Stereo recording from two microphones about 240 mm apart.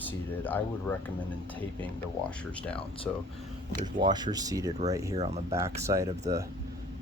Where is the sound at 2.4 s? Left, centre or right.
Centre.